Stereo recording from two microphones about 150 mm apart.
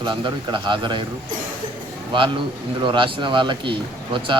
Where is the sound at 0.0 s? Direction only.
30° right (ahead or behind).